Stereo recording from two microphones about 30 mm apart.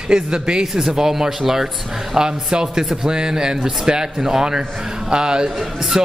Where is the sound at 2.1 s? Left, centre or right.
Right.